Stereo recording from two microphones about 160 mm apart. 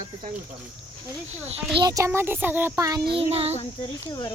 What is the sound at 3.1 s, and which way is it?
Speech, 40° right (ahead or behind).